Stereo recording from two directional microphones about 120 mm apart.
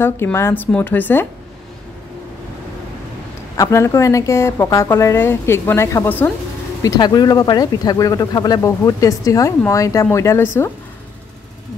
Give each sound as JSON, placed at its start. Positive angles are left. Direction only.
{"t": 0.0, "sound": "a woman's voice", "side_deg": 20}
{"t": 3.5, "sound": "a woman's voice", "side_deg": 25}
{"t": 6.8, "sound": "a woman's voice", "side_deg": 30}